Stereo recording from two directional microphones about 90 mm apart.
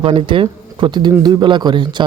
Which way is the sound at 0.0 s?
90° right.